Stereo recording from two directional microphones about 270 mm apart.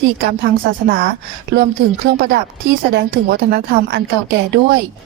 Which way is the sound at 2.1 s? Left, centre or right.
Right.